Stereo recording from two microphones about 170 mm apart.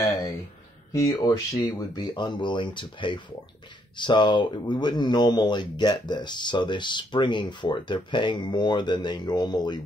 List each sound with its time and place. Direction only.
0.9 s speech: 20° left (ahead or behind)